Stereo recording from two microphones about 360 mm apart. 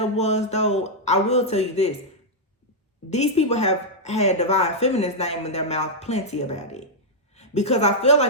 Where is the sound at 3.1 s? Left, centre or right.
Centre.